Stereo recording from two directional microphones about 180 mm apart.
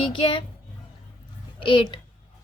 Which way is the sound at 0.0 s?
30° left (ahead or behind).